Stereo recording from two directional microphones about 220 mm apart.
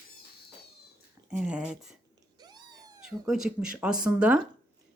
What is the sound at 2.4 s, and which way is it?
Cat, 20° right (ahead or behind).